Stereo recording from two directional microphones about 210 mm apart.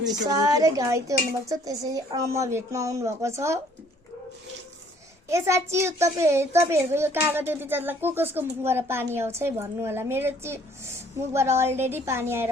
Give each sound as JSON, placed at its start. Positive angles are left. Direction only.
{"t": 0.3, "sound": "a child's voice", "side_deg": -15}
{"t": 5.3, "sound": "a child's voice", "side_deg": -15}